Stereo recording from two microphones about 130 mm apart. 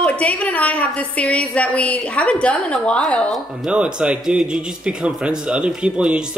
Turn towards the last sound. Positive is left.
turn(degrees=-5)  # may be behind; listen again after turning